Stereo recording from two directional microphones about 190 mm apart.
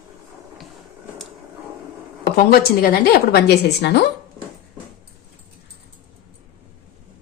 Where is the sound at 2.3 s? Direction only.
50° left (ahead or behind).